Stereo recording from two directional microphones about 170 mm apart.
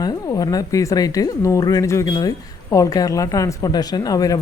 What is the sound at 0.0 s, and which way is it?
A woman's voice, 20° left (ahead or behind).